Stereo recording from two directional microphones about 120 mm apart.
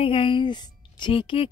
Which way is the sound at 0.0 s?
45° left (ahead or behind).